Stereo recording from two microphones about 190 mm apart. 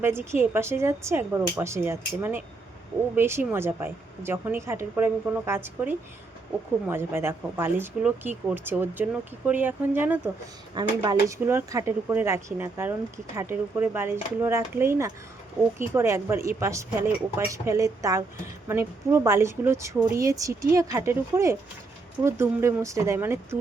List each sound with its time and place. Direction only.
0.0 s speech: 10° right (ahead or behind)
10.8 s speech: 20° right (ahead or behind)